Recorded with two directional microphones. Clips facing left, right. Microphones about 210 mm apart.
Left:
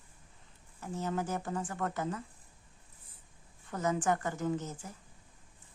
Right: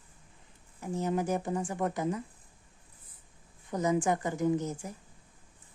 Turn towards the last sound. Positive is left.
turn(degrees=-15)  # may be behind; listen again after turning